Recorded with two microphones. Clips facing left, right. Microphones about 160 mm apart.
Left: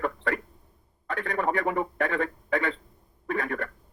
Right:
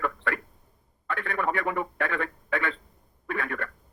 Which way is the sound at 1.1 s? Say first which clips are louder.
Left 1 dB; 20° left (ahead or behind).